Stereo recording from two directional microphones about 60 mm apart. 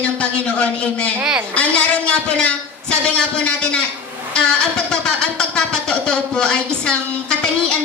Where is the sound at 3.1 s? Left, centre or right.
Centre.